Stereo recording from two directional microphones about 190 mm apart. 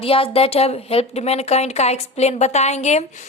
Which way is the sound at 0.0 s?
30° left (ahead or behind).